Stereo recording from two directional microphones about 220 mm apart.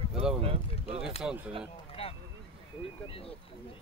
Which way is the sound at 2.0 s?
25° left (ahead or behind).